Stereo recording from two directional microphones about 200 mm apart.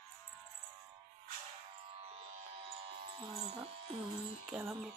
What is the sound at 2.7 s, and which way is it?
Electric shaver, 30° right (ahead or behind).